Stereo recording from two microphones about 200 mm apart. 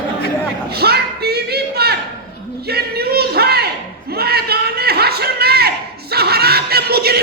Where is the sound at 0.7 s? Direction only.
50° right (ahead or behind).